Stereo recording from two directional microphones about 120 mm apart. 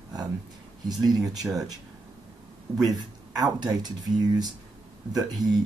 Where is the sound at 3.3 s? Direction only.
35° right (ahead or behind).